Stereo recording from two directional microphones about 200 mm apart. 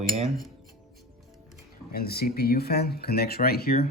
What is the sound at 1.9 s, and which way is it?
Speech, 50° left (ahead or behind).